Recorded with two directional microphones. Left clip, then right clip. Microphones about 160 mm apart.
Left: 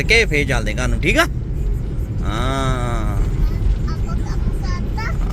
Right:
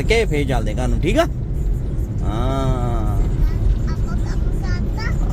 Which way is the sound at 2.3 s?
10° right (ahead or behind).